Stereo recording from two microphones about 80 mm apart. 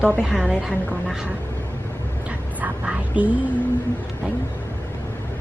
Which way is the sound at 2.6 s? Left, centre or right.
Centre.